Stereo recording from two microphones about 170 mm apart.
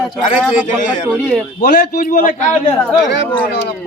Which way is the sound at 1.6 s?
50° left (ahead or behind).